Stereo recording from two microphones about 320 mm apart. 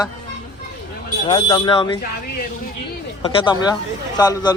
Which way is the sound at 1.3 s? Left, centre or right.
Centre.